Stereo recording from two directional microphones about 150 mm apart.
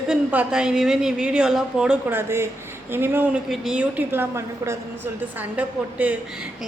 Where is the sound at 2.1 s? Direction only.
15° right (ahead or behind).